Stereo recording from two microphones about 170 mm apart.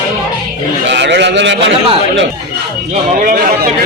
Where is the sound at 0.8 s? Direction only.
90° right.